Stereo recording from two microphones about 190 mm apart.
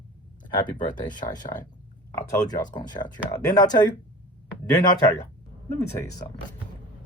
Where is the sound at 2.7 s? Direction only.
20° left (ahead or behind).